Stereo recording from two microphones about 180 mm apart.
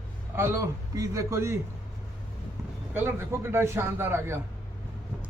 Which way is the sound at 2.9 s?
10° right (ahead or behind).